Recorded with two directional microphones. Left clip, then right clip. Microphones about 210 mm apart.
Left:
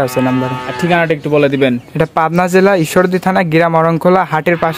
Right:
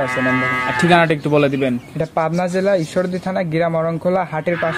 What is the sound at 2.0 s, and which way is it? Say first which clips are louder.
Speech: left 7 dB; 60° left (ahead or behind).